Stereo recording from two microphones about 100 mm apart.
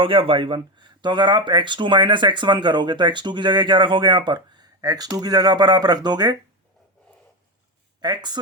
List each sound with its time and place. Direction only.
0.0 s speech: 60° right (ahead or behind); by 6.3 s 45° right (ahead or behind)
8.0 s speech: 45° right (ahead or behind)